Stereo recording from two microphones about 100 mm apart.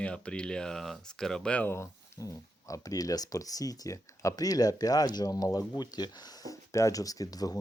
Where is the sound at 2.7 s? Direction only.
35° left (ahead or behind).